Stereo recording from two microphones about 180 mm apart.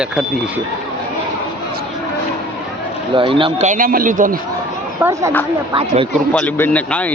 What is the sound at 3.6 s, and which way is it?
Speech, 45° right (ahead or behind).